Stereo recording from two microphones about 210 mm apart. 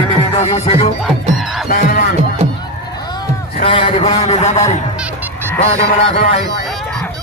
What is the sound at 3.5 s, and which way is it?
Speech, 25° left (ahead or behind).